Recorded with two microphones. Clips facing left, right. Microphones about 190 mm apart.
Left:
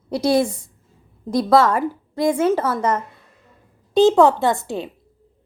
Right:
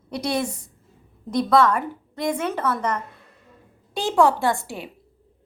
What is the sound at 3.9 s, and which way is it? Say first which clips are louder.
Speech: left 6 dB; 20° left (ahead or behind).